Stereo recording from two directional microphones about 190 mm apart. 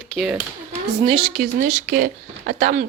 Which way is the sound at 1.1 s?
30° right (ahead or behind).